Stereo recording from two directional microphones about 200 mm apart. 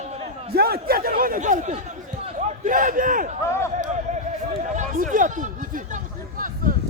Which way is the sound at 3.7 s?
35° right (ahead or behind).